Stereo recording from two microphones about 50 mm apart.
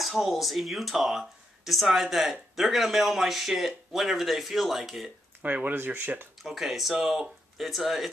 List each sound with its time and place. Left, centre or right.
0.0 s speech: centre
5.4 s speech: right
6.4 s speech: centre